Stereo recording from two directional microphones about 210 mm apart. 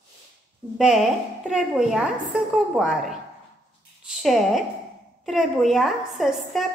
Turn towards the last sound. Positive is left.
turn(degrees=0)  # may be behind; listen again after turning